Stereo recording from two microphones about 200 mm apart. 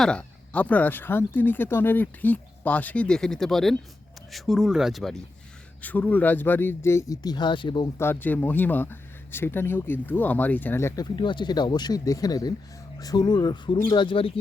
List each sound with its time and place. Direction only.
0.0 s speech: 5° left (ahead or behind); by 8.0 s 20° left (ahead or behind)
8.0 s speech: 10° left (ahead or behind); by 14.3 s 25° left (ahead or behind)